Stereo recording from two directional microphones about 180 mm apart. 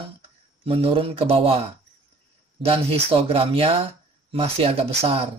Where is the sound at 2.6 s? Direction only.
35° right (ahead or behind).